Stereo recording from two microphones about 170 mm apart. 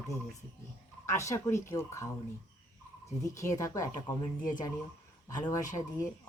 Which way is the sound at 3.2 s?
20° left (ahead or behind).